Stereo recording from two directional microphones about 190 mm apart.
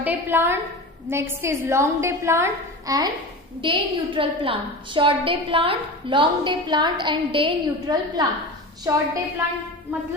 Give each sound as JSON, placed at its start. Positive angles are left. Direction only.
{"t": 0.0, "sound": "a woman's voice", "side_deg": -10}